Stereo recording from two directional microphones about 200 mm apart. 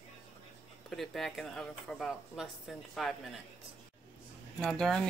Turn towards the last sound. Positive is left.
turn(degrees=0)  # may be behind; listen again after turning